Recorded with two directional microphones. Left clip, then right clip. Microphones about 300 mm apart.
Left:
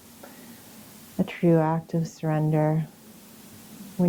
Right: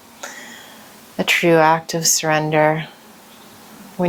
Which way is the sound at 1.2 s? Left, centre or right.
Centre.